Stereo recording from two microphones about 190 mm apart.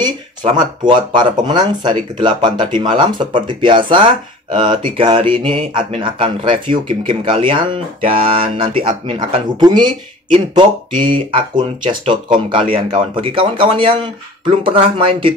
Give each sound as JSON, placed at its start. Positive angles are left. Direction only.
{"t": 0.4, "sound": "speech", "side_deg": -35}
{"t": 0.8, "sound": "speech", "side_deg": -25}